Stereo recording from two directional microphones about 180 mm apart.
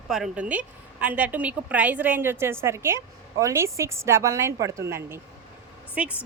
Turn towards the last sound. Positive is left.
turn(degrees=-5)  # may be behind; listen again after turning